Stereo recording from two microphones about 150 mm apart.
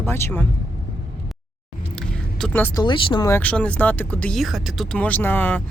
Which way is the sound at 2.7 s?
30° left (ahead or behind).